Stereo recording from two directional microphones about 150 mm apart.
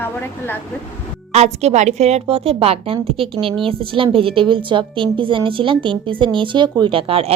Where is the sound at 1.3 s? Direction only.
45° right (ahead or behind).